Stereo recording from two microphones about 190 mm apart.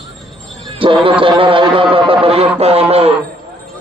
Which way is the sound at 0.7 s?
25° right (ahead or behind).